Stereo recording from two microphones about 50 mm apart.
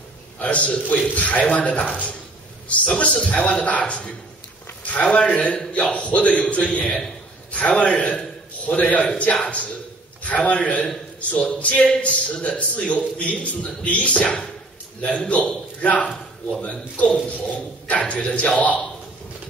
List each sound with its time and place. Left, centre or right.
0.4 s a man's voice: left